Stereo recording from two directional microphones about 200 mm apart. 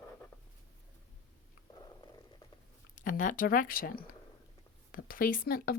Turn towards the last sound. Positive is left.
turn(degrees=50)  # may be behind; listen again after turning